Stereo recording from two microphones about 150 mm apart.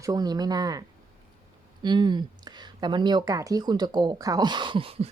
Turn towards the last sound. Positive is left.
turn(degrees=-40)  # may be behind; listen again after turning